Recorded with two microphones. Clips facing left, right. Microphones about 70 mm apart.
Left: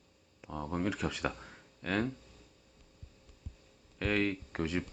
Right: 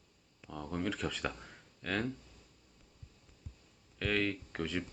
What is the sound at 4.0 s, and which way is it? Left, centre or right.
Speech, centre.